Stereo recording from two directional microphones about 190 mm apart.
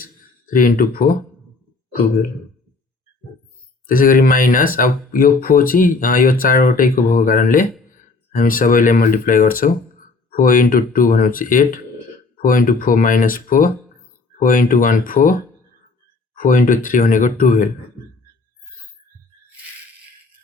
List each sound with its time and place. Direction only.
0.4 s speech: 45° left (ahead or behind)
3.8 s speech: 45° left (ahead or behind)
16.4 s speech: 45° left (ahead or behind)